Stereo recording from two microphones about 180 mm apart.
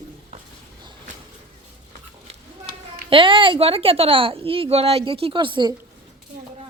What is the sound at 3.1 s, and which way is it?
Speech, 30° right (ahead or behind).